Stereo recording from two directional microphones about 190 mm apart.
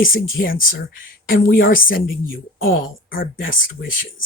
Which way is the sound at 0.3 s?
50° left (ahead or behind).